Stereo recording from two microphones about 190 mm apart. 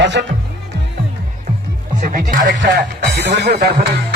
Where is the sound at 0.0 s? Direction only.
70° right (ahead or behind).